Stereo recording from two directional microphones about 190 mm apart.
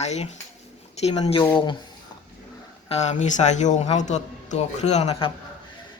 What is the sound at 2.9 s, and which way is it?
A woman's voice, 35° left (ahead or behind).